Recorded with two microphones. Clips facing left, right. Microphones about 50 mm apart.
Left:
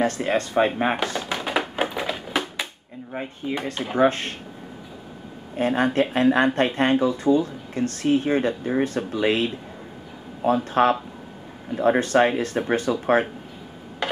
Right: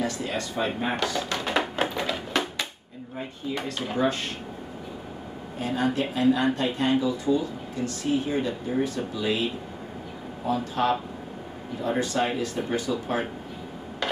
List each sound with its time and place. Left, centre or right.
0.0 s speech: left
1.2 s music: centre
3.4 s speech: left
5.6 s speech: left